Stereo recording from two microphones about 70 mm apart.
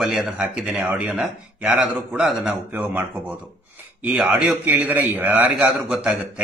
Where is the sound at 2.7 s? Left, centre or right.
Right.